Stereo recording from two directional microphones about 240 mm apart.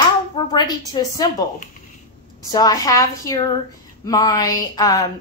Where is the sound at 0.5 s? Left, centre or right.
Centre.